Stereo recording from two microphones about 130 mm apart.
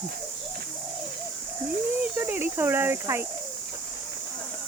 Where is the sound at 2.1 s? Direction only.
15° right (ahead or behind).